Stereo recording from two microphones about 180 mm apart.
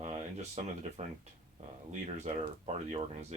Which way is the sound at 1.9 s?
40° right (ahead or behind).